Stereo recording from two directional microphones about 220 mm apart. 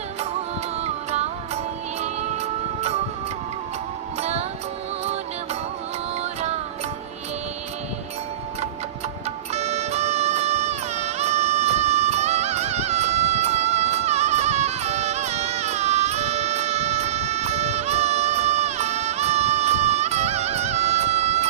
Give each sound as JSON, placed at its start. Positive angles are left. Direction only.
{"t": 4.2, "sound": "music", "side_deg": -30}
{"t": 9.5, "sound": "music", "side_deg": -30}